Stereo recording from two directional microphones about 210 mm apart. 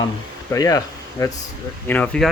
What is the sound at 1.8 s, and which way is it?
Speech, 5° left (ahead or behind).